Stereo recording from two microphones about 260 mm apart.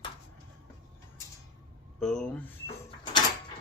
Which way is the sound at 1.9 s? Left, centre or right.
Centre.